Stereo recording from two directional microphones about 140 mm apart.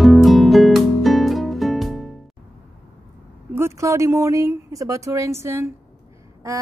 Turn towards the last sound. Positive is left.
turn(degrees=-20)  # may be behind; listen again after turning